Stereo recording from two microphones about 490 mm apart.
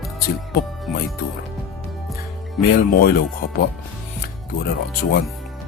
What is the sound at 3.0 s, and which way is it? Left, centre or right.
Speech, centre.